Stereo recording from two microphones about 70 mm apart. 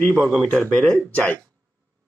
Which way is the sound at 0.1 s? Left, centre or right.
Centre.